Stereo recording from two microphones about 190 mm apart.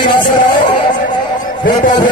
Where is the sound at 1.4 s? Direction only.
45° left (ahead or behind).